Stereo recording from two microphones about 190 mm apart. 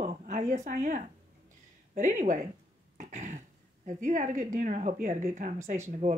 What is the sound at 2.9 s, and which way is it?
Cough, 40° right (ahead or behind).